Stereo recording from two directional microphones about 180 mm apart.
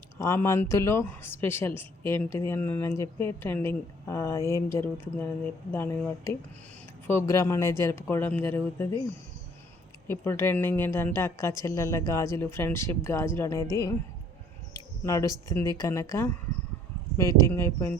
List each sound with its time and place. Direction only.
0.2 s speech: 15° left (ahead or behind)
7.1 s speech: 15° left (ahead or behind)
10.1 s speech: 15° left (ahead or behind)
15.0 s speech: 15° left (ahead or behind)
17.4 s speech: 15° left (ahead or behind)